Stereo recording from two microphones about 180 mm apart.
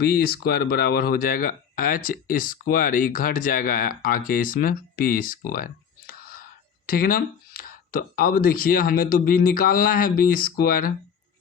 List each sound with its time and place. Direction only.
0.0 s speech: 55° left (ahead or behind)
6.8 s speech: 55° left (ahead or behind)